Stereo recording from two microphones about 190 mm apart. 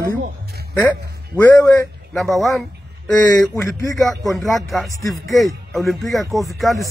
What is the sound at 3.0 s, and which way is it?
Speech, 10° left (ahead or behind).